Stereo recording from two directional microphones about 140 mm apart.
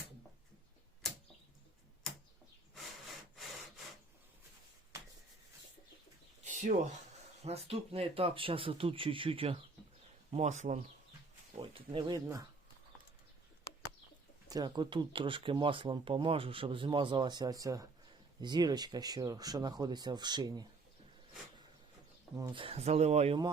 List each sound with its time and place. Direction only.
6.4 s a sound: 60° right (ahead or behind)
7.4 s speech: 45° right (ahead or behind)
10.3 s speech: 55° right (ahead or behind)
11.5 s speech: 45° right (ahead or behind); by 12.5 s 25° right (ahead or behind)
14.4 s speech: 30° right (ahead or behind)
22.5 s speech: 40° right (ahead or behind)